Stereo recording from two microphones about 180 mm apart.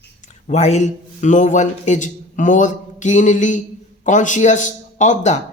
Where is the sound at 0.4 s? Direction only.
40° left (ahead or behind).